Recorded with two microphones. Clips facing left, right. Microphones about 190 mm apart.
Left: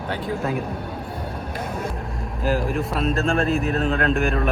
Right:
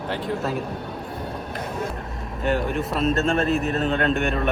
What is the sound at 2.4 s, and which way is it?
Speech, centre (ahead or behind).